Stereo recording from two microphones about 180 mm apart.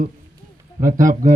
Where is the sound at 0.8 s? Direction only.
50° right (ahead or behind).